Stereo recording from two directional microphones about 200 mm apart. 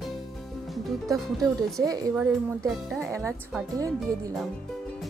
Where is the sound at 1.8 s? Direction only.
15° right (ahead or behind).